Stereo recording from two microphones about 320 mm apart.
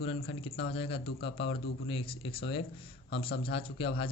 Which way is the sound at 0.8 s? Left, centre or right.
Centre.